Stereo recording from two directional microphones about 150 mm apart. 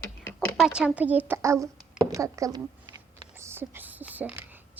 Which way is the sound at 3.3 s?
15° right (ahead or behind).